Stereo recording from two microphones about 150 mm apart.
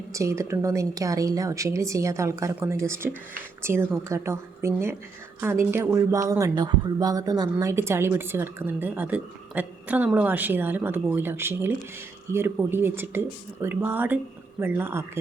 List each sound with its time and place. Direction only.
0.1 s a woman's voice: 20° right (ahead or behind)